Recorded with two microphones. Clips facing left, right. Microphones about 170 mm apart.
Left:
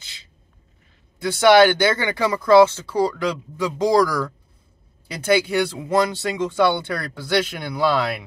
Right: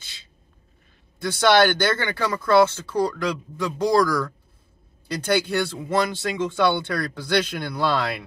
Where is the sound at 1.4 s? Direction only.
10° left (ahead or behind).